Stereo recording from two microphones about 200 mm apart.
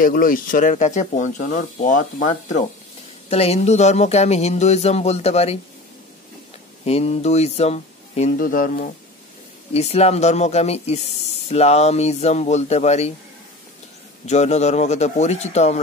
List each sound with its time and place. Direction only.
0.0 s speech: 45° left (ahead or behind)
6.8 s speech: 30° left (ahead or behind)
9.8 s speech: 30° left (ahead or behind)
14.2 s speech: 35° left (ahead or behind)